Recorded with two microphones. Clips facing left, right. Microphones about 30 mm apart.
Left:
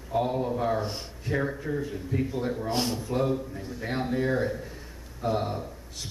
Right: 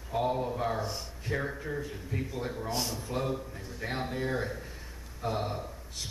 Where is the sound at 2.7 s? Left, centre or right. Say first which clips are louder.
Left 5 dB; left.